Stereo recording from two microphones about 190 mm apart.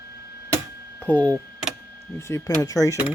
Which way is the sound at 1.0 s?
5° left (ahead or behind).